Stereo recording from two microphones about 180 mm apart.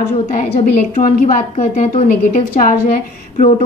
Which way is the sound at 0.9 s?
45° left (ahead or behind).